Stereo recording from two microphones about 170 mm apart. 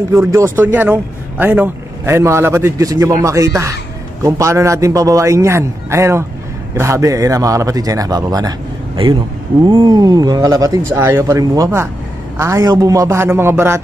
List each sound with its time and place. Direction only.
0.1 s a man's voice: 15° right (ahead or behind)